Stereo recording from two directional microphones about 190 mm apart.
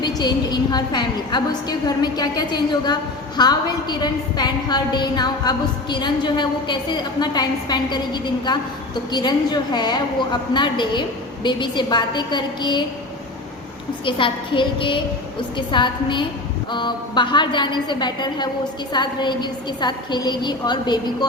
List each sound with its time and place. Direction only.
0.0 s a woman's voice: 20° left (ahead or behind)
14.0 s a woman's voice: 25° left (ahead or behind)